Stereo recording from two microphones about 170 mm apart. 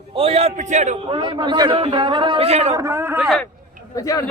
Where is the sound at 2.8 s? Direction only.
15° right (ahead or behind).